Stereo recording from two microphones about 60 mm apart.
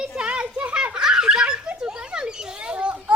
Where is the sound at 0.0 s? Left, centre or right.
Centre.